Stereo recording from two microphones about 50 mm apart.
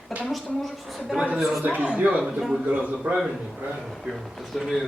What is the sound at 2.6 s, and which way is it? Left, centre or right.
Speech, right.